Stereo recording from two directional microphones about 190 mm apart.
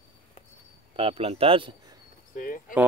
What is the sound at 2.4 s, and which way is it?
Speech, 45° left (ahead or behind).